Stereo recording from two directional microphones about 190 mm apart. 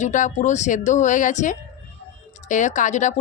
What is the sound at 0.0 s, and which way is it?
Speech, 40° left (ahead or behind).